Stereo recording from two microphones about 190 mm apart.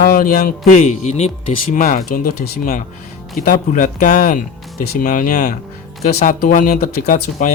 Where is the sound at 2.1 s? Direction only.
55° left (ahead or behind).